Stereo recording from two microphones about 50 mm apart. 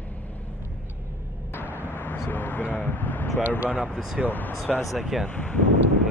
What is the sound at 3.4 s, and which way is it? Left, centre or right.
Speech, right.